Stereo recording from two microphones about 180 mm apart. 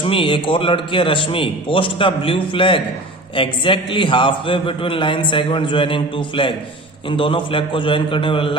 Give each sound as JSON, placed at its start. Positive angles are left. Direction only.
{"t": 0.0, "sound": "a man's voice", "side_deg": 30}